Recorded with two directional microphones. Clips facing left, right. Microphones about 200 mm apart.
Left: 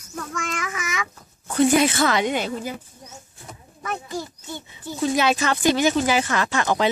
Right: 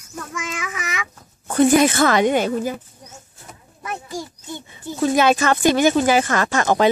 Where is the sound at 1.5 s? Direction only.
50° right (ahead or behind).